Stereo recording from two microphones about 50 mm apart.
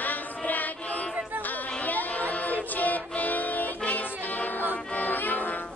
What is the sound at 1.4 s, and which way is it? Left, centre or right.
Music, left.